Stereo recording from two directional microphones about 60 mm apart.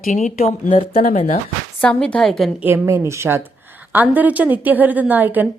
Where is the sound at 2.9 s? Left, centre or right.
Right.